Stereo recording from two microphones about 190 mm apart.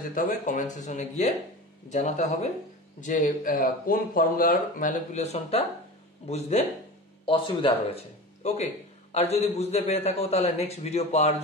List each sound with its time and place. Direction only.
0.1 s a man's voice: 45° left (ahead or behind)